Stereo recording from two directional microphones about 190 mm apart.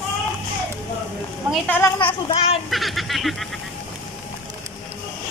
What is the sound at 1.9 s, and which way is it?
Speech, 30° left (ahead or behind).